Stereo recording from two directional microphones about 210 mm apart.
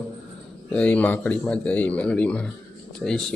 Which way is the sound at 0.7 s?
5° left (ahead or behind).